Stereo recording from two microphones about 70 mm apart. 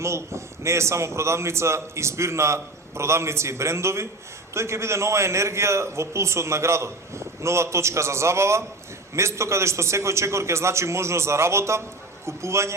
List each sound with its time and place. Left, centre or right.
0.0 s a man's voice: right